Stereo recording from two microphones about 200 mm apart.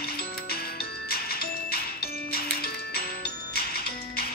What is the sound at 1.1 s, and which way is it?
Music, 50° left (ahead or behind).